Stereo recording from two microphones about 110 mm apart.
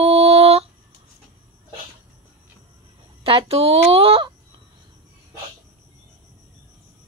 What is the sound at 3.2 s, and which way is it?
Speech, 60° right (ahead or behind).